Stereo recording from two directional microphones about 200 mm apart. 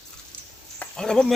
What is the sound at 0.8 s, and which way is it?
Speech, 5° left (ahead or behind).